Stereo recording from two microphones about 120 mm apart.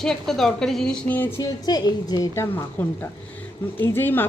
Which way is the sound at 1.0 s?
15° left (ahead or behind).